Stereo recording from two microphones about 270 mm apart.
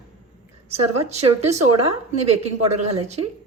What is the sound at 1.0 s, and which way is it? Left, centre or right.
A woman's voice, right.